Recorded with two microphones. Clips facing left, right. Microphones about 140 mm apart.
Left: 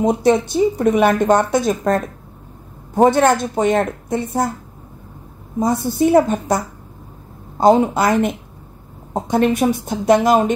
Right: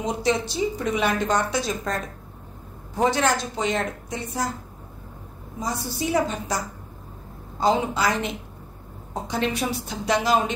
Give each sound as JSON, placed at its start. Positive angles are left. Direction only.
{"t": 0.0, "sound": "a woman's voice", "side_deg": 55}
{"t": 5.6, "sound": "a woman's voice", "side_deg": 55}
{"t": 7.6, "sound": "a woman's voice", "side_deg": 50}